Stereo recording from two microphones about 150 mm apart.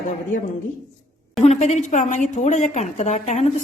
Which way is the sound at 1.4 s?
50° left (ahead or behind).